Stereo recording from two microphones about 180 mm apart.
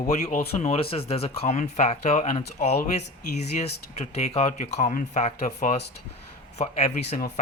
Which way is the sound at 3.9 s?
35° left (ahead or behind).